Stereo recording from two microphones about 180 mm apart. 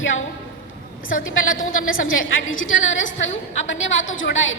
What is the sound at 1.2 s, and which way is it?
A woman's voice, 90° left.